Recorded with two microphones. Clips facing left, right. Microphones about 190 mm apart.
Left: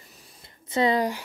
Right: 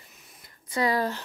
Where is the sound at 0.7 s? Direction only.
20° left (ahead or behind).